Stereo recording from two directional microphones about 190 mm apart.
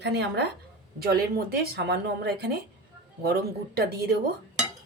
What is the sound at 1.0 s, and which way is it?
Speech, 55° right (ahead or behind).